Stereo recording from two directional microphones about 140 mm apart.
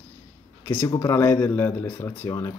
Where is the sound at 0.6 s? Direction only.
20° left (ahead or behind).